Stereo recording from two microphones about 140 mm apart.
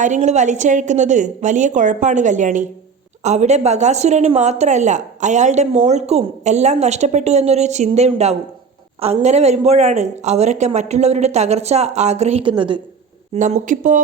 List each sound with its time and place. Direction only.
0.0 s a woman's voice: 55° right (ahead or behind); by 12.8 s 35° right (ahead or behind)
13.3 s speech: 65° right (ahead or behind)